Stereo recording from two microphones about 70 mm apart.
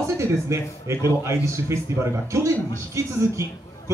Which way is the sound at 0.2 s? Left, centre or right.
Right.